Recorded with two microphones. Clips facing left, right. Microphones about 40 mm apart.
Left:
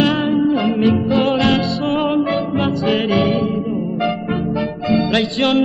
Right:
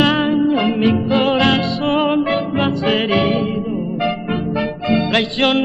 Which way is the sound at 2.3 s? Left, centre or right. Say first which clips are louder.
Even; right.